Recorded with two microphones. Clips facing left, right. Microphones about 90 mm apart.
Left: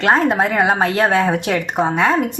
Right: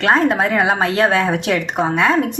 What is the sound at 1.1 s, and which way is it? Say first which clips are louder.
Speech: left 1 dB; 20° left (ahead or behind).